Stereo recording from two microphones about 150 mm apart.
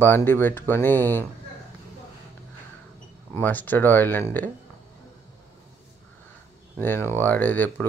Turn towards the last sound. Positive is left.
turn(degrees=10)  # may be behind; listen again after turning